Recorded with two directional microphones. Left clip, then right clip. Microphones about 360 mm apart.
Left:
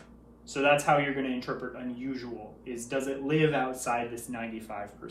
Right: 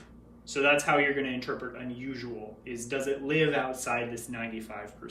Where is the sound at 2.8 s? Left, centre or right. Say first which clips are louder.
Right 1 dB; centre.